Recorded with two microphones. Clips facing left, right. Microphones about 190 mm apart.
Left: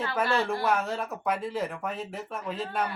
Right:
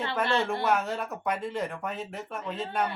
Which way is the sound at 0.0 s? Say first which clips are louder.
Even; centre (ahead or behind).